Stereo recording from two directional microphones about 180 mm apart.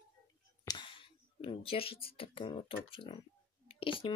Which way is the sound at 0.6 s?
25° left (ahead or behind).